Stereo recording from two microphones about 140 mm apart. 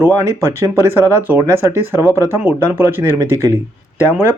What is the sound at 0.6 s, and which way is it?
Speech, 15° right (ahead or behind).